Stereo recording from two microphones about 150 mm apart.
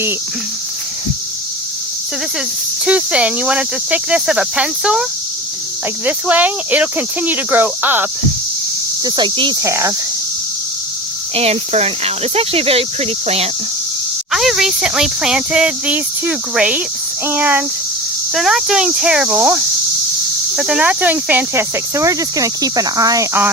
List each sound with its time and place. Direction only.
2.8 s speech: 10° right (ahead or behind)
6.1 s speech: 10° right (ahead or behind)
9.0 s speech: 30° right (ahead or behind)
11.3 s speech: 45° right (ahead or behind)
14.3 s speech: 5° right (ahead or behind)
18.3 s speech: centre (ahead or behind); by 23.5 s 15° right (ahead or behind)